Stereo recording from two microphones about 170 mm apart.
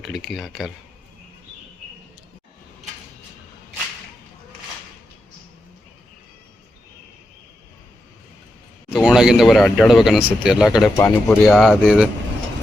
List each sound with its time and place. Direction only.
0.0 s speech: centre (ahead or behind)
8.9 s speech: 5° right (ahead or behind)
10.9 s speech: 15° left (ahead or behind)
11.4 s speech: centre (ahead or behind)